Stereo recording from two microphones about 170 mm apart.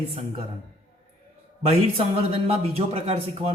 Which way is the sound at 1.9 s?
35° right (ahead or behind).